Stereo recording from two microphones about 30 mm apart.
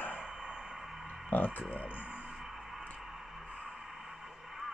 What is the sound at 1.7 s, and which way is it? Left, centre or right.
Speech, right.